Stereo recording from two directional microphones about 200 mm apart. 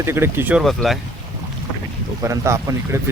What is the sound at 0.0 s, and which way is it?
Speech, 10° right (ahead or behind).